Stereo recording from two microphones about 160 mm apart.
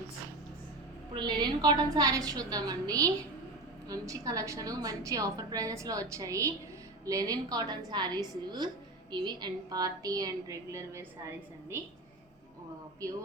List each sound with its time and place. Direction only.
1.1 s a woman's voice: 25° right (ahead or behind)